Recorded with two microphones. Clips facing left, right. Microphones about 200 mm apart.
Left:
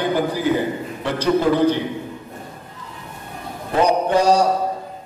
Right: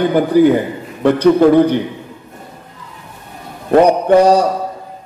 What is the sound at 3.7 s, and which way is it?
Speech, 60° right (ahead or behind).